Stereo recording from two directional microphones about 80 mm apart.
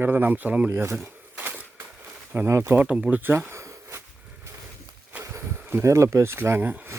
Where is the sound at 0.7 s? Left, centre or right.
Right.